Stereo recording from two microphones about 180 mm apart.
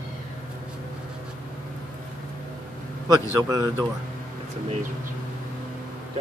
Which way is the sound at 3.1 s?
20° right (ahead or behind).